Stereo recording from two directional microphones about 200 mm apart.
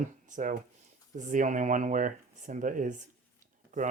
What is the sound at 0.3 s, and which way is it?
Speech, 40° right (ahead or behind).